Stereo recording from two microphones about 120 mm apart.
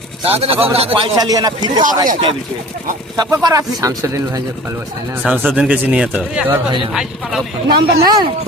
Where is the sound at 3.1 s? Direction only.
30° right (ahead or behind).